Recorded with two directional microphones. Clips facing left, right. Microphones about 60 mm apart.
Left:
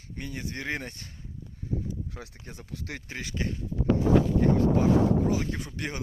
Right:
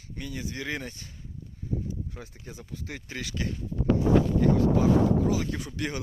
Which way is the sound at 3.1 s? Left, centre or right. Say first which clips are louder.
Even; left.